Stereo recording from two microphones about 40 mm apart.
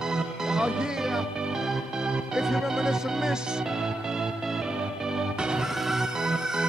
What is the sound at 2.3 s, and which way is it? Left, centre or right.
Music, centre.